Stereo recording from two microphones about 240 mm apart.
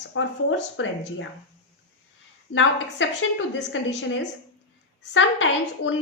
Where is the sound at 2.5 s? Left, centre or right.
Left.